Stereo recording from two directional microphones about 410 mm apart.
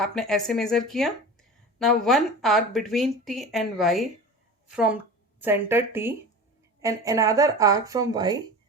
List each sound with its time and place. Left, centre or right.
0.0 s speech: centre